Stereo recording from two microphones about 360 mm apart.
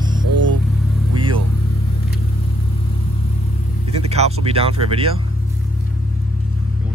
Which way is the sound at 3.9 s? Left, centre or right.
Centre.